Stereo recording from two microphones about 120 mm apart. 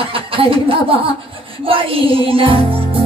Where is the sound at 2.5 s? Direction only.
50° right (ahead or behind).